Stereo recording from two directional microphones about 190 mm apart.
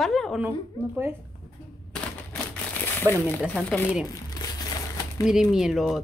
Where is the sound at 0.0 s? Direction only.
Centre (ahead or behind).